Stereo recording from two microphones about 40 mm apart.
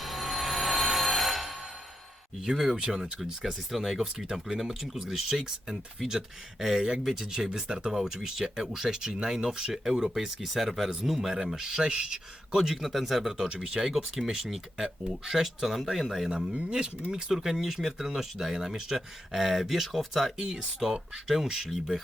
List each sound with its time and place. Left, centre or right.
0.0 s music: centre
2.7 s speech: centre
12.7 s speech: centre
13.2 s speech: centre
17.1 s speech: centre
20.4 s speech: centre